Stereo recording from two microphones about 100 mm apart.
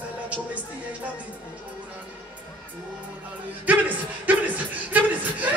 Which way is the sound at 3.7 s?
15° right (ahead or behind).